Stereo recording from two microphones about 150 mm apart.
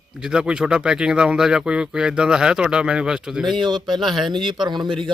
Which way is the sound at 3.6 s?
30° right (ahead or behind).